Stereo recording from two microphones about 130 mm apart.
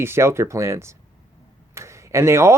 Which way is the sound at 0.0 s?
20° right (ahead or behind).